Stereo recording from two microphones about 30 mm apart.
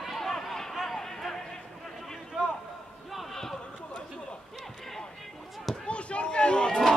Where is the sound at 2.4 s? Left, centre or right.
Right.